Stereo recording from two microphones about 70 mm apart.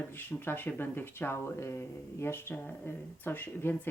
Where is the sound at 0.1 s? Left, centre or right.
Left.